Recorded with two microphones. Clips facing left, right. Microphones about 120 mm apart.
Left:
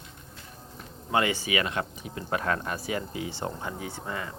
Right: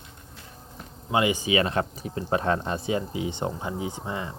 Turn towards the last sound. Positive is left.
turn(degrees=-20)  # may be behind; listen again after turning